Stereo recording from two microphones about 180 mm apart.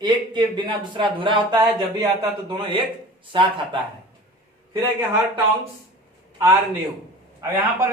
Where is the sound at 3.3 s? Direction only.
25° right (ahead or behind).